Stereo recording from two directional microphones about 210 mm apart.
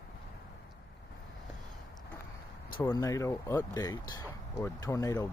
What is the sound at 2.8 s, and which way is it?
Speech, 15° left (ahead or behind).